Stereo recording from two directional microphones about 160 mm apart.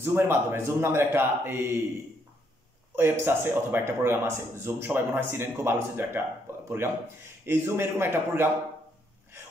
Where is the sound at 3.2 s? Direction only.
15° right (ahead or behind).